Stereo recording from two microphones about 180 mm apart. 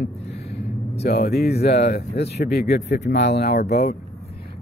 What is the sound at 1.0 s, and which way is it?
A man's voice, 60° left (ahead or behind).